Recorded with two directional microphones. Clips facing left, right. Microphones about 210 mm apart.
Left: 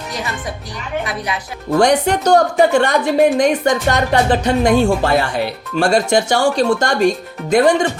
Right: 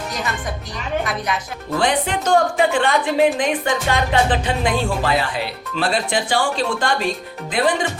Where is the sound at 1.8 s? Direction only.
45° left (ahead or behind).